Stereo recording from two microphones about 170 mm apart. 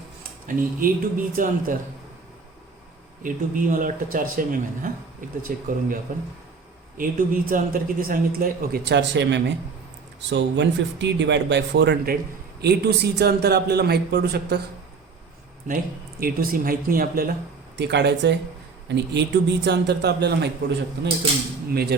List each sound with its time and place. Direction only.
0.4 s speech: 55° right (ahead or behind)
3.2 s a man's voice: 55° right (ahead or behind); by 12.1 s 85° right
12.6 s a man's voice: 75° right (ahead or behind)
16.2 s a man's voice: 60° right (ahead or behind)
17.7 s a man's voice: 90° right
21.7 s a man's voice: 65° right (ahead or behind)